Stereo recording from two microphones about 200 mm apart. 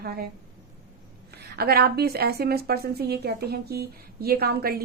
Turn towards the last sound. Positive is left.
turn(degrees=-50)  # may be behind; listen again after turning